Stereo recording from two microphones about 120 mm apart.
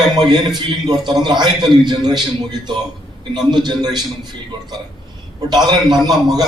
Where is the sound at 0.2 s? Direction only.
35° right (ahead or behind).